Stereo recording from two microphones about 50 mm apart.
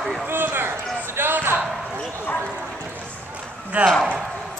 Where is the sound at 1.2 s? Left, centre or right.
Right.